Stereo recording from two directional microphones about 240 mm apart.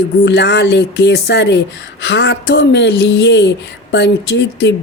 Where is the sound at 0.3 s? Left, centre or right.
Left.